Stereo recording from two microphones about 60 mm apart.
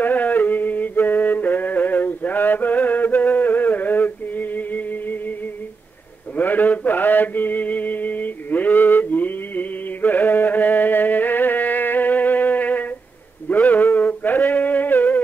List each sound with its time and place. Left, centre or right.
0.0 s yodeling: left
6.3 s mantra: left
13.7 s a sound: left